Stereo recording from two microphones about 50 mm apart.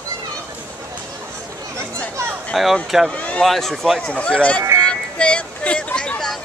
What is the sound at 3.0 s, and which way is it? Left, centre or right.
Speech, left.